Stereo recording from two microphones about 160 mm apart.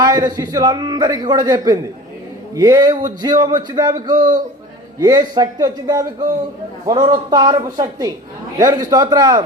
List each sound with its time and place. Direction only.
0.0 s a man's voice: 25° right (ahead or behind)